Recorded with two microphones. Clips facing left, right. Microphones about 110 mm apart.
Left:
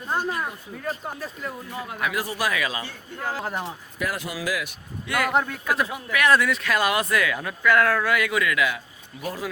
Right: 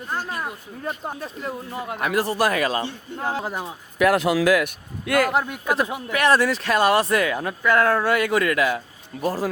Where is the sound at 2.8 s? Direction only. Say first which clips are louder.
Right 4 dB; 25° right (ahead or behind).